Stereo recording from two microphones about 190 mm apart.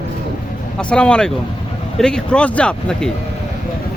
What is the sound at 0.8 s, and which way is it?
Speech, 5° left (ahead or behind).